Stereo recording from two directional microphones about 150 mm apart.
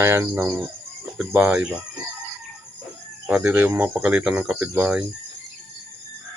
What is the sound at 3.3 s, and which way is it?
Speech, 10° right (ahead or behind).